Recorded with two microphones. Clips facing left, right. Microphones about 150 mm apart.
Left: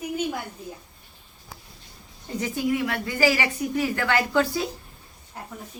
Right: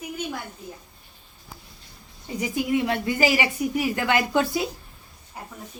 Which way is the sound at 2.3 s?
5° right (ahead or behind).